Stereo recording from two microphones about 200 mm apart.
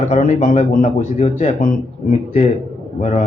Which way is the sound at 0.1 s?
35° left (ahead or behind).